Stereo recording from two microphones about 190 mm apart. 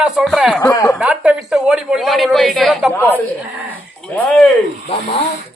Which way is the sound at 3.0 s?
10° left (ahead or behind).